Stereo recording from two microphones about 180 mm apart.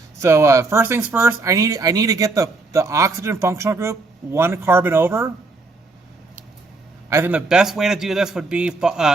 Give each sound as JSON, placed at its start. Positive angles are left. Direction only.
{"t": 0.2, "sound": "speech", "side_deg": -15}
{"t": 7.1, "sound": "a man's voice", "side_deg": -10}